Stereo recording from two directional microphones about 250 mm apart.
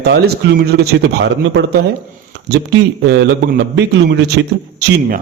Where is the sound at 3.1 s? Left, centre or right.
Right.